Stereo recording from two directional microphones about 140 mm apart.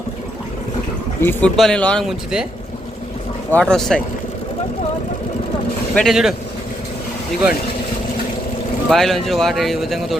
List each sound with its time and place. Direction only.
1.2 s speech: 15° left (ahead or behind)
1.5 s a man's voice: 5° left (ahead or behind)
3.5 s a man's voice: 5° left (ahead or behind)
5.9 s a man's voice: centre (ahead or behind)
8.9 s a man's voice: centre (ahead or behind)